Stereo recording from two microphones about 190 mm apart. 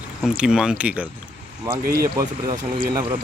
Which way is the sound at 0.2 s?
5° right (ahead or behind).